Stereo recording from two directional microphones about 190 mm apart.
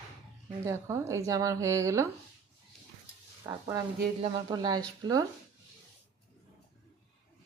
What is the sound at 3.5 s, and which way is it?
Speech, 20° right (ahead or behind).